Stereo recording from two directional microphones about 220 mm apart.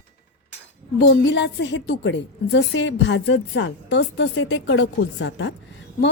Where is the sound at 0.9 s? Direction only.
55° left (ahead or behind).